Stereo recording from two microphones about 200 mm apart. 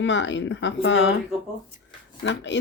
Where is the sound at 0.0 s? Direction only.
65° left (ahead or behind).